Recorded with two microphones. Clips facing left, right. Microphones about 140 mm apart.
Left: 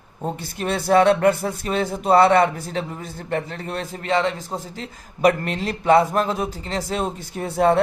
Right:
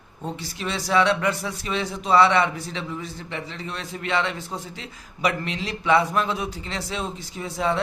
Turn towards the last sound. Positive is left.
turn(degrees=50)  # may be behind; listen again after turning